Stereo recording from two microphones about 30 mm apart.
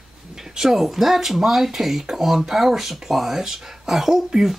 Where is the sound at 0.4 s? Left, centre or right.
Centre.